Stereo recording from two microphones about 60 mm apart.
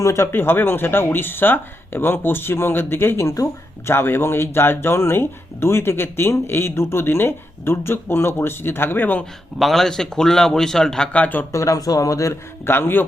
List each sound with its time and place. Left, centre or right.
0.0 s speech: left
0.3 s speech: left
9.6 s speech: centre
11.1 s speech: left
11.5 s speech: left
12.6 s speech: left